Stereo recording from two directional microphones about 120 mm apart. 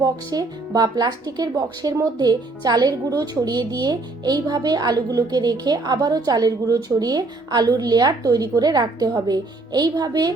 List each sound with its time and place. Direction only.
0.0 s speech: 30° right (ahead or behind)